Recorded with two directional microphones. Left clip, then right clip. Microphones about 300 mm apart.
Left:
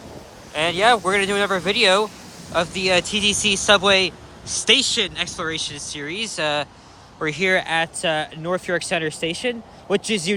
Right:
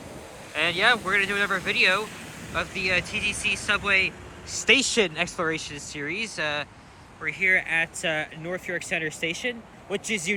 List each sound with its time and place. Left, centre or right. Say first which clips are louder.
0.5 s speech: left 5 dB; centre